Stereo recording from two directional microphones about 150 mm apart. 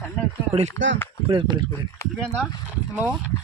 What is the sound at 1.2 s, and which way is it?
Speech, 30° right (ahead or behind).